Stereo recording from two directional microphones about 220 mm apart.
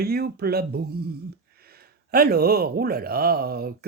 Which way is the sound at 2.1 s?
45° right (ahead or behind).